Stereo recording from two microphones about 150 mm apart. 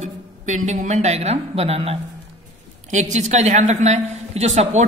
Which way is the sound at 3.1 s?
50° right (ahead or behind).